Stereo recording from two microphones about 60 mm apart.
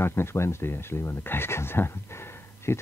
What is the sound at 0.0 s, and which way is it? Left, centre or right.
Speech, left.